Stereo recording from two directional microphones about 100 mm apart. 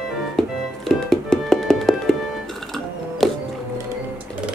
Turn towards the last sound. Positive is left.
turn(degrees=0)  # may be behind; listen again after turning